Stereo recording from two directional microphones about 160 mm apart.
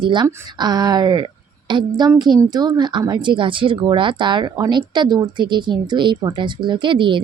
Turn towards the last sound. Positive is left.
turn(degrees=-30)  # may be behind; listen again after turning